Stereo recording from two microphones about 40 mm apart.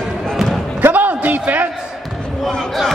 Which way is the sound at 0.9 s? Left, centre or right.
Right.